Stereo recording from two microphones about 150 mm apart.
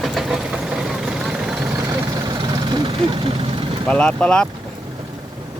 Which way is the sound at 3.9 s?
5° left (ahead or behind).